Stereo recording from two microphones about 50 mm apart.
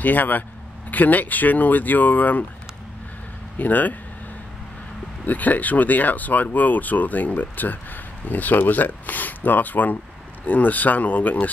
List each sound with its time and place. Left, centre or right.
0.0 s speech: left
3.5 s speech: left
5.2 s speech: left